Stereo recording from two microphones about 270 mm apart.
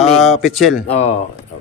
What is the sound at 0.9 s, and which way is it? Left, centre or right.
Speech, left.